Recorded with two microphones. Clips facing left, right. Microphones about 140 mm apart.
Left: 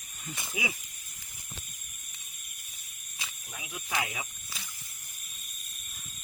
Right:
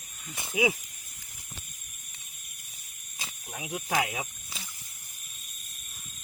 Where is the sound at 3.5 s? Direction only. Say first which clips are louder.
Right 5 dB; 50° right (ahead or behind).